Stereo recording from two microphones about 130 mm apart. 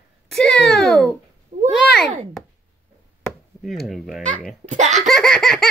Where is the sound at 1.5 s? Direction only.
60° right (ahead or behind).